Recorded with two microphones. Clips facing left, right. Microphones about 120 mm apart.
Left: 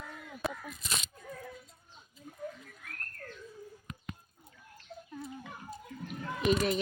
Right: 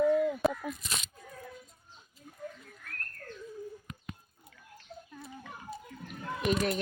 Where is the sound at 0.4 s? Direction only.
Centre (ahead or behind).